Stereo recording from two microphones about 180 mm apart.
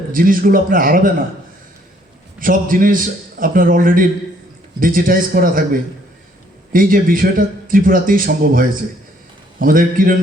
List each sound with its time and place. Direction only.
0.1 s a man's voice: 50° right (ahead or behind)
2.4 s a man's voice: 50° right (ahead or behind)
6.7 s a man's voice: 50° right (ahead or behind)